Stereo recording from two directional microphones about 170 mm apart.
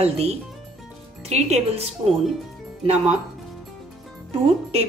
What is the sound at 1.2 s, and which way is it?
Speech, 40° right (ahead or behind).